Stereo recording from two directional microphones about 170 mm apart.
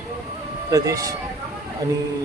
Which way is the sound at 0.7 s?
20° right (ahead or behind).